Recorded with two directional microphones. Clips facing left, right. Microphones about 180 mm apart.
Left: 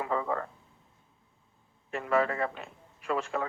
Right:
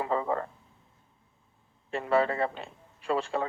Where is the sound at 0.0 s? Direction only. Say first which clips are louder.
Right 2 dB; 30° right (ahead or behind).